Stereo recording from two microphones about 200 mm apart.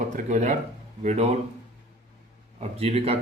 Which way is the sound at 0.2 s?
40° right (ahead or behind).